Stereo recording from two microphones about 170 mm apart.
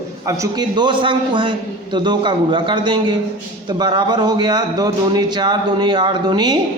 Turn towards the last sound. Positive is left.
turn(degrees=-25)  # may be behind; listen again after turning